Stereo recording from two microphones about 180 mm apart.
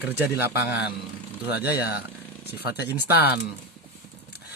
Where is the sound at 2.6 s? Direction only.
65° left (ahead or behind).